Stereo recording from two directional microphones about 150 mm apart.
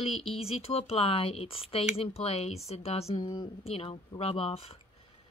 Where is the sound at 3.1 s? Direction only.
30° left (ahead or behind).